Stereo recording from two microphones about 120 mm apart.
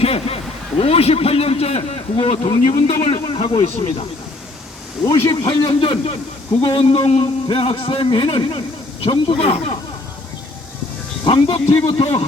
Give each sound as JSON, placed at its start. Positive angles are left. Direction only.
{"t": 0.0, "sound": "a sound", "side_deg": 55}
{"t": 0.8, "sound": "a man's voice", "side_deg": 55}
{"t": 5.0, "sound": "a man's voice", "side_deg": 30}
{"t": 11.3, "sound": "a man's voice", "side_deg": 45}